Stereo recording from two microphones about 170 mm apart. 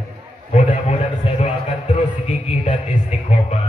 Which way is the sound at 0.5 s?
45° left (ahead or behind).